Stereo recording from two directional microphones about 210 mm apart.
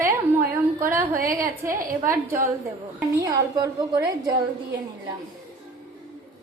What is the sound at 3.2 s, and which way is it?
A woman's voice, 15° right (ahead or behind).